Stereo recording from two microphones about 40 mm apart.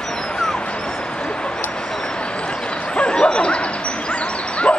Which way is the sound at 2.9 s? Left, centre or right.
Left.